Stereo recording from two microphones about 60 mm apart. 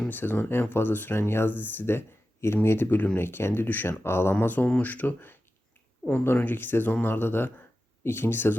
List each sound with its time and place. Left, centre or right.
0.1 s speech: left
4.4 s speech: left